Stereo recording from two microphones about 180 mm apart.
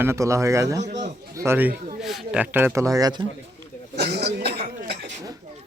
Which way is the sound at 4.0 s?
65° right (ahead or behind).